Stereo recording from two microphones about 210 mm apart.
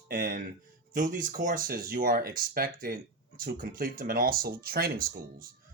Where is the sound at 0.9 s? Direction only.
40° right (ahead or behind).